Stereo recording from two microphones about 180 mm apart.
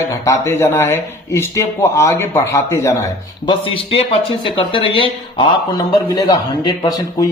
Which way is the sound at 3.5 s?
30° left (ahead or behind).